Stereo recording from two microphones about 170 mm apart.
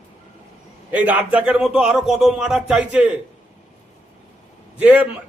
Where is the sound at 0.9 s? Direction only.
10° right (ahead or behind).